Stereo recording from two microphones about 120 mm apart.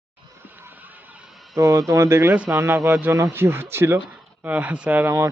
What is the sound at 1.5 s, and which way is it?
Speech, 25° right (ahead or behind).